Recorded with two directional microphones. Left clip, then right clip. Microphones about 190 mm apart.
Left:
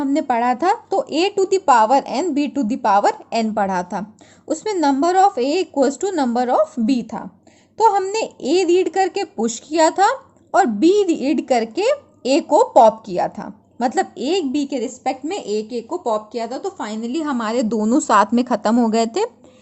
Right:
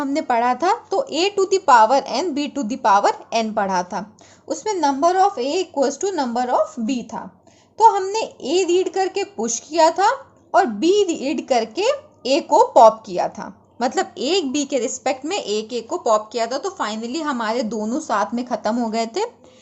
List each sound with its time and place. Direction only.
0.0 s a woman's voice: 30° left (ahead or behind)